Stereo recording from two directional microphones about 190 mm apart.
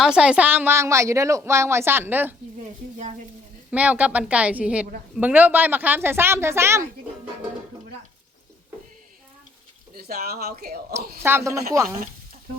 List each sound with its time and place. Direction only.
0.0 s a woman's voice: 5° right (ahead or behind)
3.7 s a woman's voice: 5° right (ahead or behind)
9.9 s speech: 55° right (ahead or behind)
11.2 s a woman's voice: 10° right (ahead or behind)